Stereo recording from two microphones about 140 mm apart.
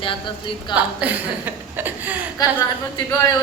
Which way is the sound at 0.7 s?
10° right (ahead or behind).